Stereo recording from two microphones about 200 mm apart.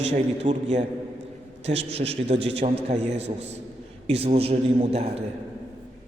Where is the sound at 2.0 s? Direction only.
30° right (ahead or behind).